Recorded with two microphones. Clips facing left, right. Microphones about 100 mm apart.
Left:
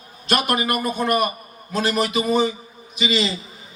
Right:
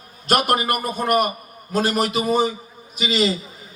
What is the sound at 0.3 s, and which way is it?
A man's voice, 45° right (ahead or behind).